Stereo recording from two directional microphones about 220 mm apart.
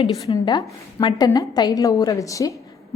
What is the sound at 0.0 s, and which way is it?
A woman's voice, 15° left (ahead or behind).